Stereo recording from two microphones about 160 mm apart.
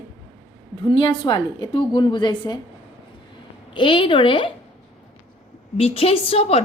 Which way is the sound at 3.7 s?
30° left (ahead or behind).